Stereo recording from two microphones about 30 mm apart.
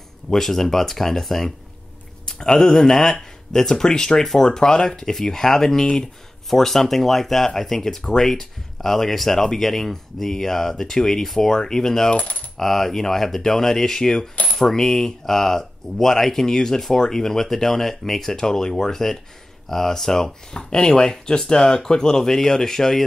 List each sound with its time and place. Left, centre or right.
0.3 s speech: centre
2.2 s speech: left
2.7 s speech: centre
5.0 s speech: centre
12.1 s coin: left
12.5 s speech: centre
18.3 s speech: centre